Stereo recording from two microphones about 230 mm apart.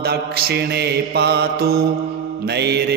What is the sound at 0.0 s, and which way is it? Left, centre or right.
Mantra, right.